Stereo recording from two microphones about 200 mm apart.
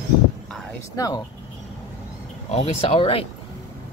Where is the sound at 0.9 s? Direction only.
15° left (ahead or behind).